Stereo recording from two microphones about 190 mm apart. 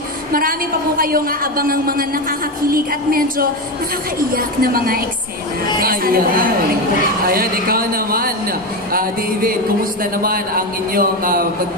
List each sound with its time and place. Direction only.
0.3 s a woman's voice: 50° right (ahead or behind)